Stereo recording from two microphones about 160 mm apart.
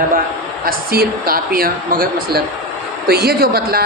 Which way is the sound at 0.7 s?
65° right (ahead or behind).